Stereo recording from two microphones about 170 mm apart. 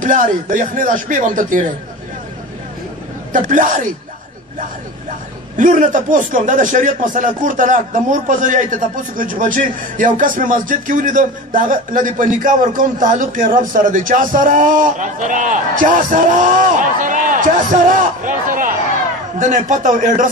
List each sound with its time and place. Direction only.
0.0 s speech: 50° right (ahead or behind)
3.3 s speech: 50° right (ahead or behind)
5.6 s speech: 50° right (ahead or behind)